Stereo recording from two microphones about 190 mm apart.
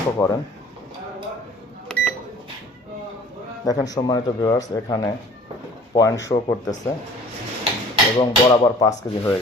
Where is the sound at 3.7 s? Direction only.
20° left (ahead or behind).